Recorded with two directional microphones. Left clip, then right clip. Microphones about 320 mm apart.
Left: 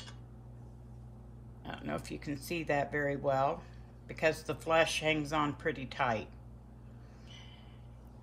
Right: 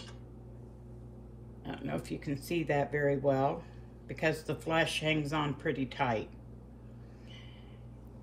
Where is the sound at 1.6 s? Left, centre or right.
Centre.